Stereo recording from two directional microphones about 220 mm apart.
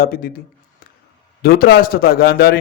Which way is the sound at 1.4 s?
45° left (ahead or behind).